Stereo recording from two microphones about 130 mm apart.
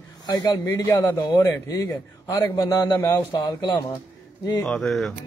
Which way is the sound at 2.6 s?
30° left (ahead or behind).